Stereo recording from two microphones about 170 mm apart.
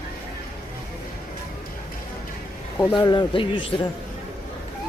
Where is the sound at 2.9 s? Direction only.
25° left (ahead or behind).